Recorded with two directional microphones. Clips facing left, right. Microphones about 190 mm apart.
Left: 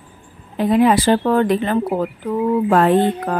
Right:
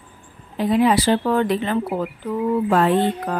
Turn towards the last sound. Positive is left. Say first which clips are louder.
# left 3 dB
turn(degrees=50)  # may be behind; listen again after turning